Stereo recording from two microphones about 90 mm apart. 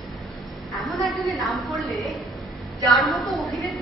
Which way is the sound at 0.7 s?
Centre (ahead or behind).